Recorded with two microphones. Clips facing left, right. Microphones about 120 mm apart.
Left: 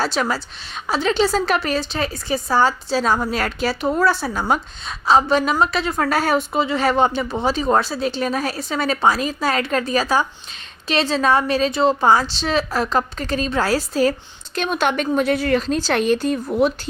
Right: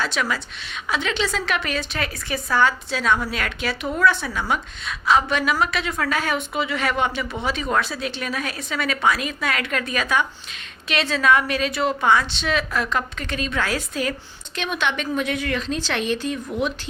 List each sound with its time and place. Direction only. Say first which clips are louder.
0.0 s a woman's voice: left 4 dB; 35° left (ahead or behind)